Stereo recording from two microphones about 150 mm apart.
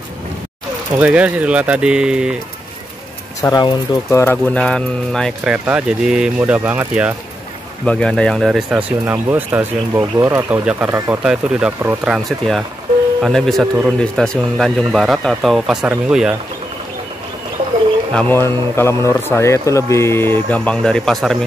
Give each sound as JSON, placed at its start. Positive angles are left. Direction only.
{"t": 0.9, "sound": "speech", "side_deg": -10}
{"t": 3.4, "sound": "speech", "side_deg": 25}
{"t": 4.6, "sound": "speech", "side_deg": 5}
{"t": 5.5, "sound": "speech", "side_deg": -10}
{"t": 7.8, "sound": "speech", "side_deg": 5}
{"t": 18.1, "sound": "a man's voice", "side_deg": 10}